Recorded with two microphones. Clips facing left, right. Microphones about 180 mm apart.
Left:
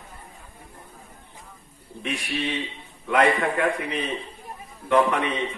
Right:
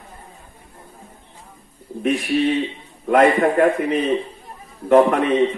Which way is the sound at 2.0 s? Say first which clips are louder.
Right 10 dB; 40° right (ahead or behind).